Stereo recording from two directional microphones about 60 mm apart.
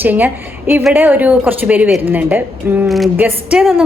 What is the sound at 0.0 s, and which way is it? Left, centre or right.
A woman's voice, right.